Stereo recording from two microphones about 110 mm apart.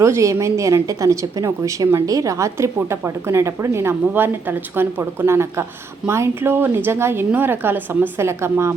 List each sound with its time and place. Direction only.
0.0 s a woman's voice: 25° right (ahead or behind)